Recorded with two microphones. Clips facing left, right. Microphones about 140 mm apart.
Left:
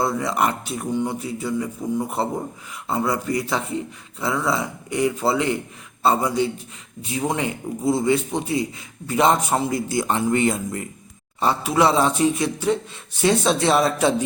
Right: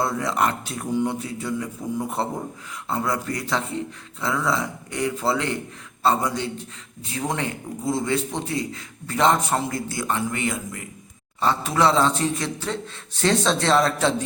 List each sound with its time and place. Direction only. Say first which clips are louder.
0.0 s a man's voice: left 1 dB; 5° left (ahead or behind); by 10.8 s 30° left (ahead or behind)
11.3 s a man's voice: left 2 dB; 10° left (ahead or behind)